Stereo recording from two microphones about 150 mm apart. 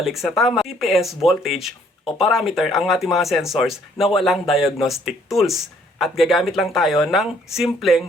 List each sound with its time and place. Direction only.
0.0 s speech: centre (ahead or behind)